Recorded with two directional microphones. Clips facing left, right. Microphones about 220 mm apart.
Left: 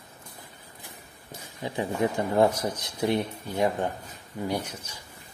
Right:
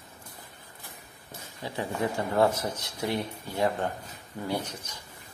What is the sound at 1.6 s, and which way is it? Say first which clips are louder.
Speech: left 3 dB; 15° left (ahead or behind).